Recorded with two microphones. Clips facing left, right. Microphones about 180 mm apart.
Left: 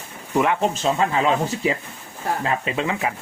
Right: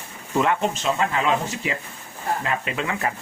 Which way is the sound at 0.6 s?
35° left (ahead or behind).